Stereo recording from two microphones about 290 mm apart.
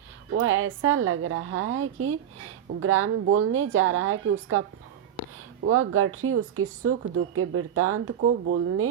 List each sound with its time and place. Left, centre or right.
0.3 s a woman's voice: right
5.6 s a woman's voice: right